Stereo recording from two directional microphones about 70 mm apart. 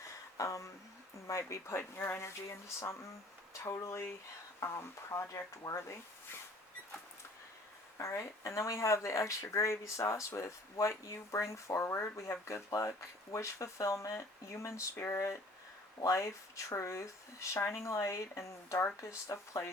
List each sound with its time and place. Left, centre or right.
0.3 s a sound: left
1.3 s speech: left
7.9 s speech: left